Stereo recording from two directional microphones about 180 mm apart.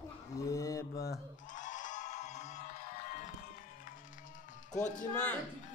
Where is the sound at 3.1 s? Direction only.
45° left (ahead or behind).